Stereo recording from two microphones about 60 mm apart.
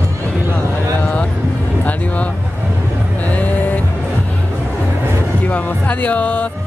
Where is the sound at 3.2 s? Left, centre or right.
Left.